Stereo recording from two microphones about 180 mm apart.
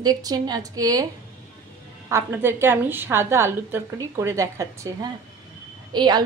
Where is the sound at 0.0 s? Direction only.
20° right (ahead or behind).